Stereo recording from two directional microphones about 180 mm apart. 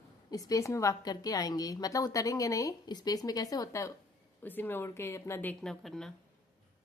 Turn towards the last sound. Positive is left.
turn(degrees=0)  # may be behind; listen again after turning